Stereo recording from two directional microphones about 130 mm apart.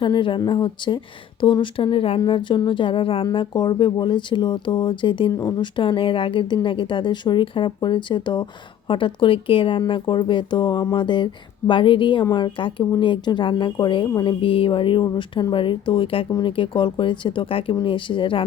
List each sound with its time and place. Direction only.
0.0 s speech: 40° left (ahead or behind)
3.3 s speech: 35° left (ahead or behind)
5.3 s speech: 25° left (ahead or behind)
5.5 s speech: 35° left (ahead or behind)